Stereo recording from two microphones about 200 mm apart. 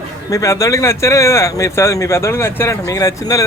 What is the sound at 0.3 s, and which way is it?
Speech, 15° left (ahead or behind).